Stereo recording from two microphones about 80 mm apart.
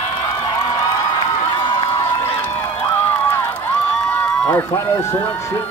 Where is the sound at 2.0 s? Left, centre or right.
Left.